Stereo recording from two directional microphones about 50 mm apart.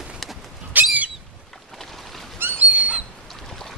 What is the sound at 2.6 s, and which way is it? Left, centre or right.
Bird, right.